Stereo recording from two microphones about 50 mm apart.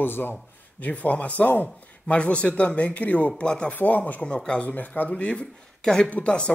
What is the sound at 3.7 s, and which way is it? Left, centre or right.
Speech, left.